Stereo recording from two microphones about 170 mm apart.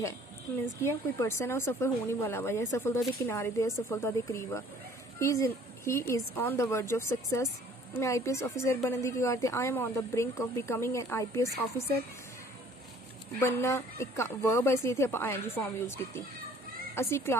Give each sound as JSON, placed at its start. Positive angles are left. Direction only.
{"t": 0.8, "sound": "a woman's voice", "side_deg": 15}
{"t": 13.4, "sound": "a woman's voice", "side_deg": 15}